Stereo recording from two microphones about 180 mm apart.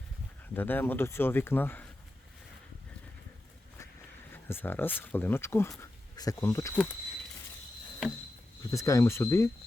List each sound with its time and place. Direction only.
0.5 s speech: 10° left (ahead or behind)
4.4 s speech: 10° left (ahead or behind)
8.7 s speech: 15° left (ahead or behind)